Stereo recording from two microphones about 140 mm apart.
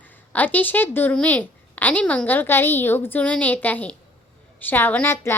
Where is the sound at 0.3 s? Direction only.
10° left (ahead or behind).